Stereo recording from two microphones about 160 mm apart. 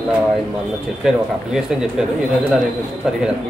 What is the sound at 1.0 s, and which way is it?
Speech, centre (ahead or behind).